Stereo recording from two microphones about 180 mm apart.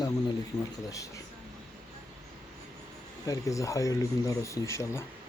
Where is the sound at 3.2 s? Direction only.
15° left (ahead or behind).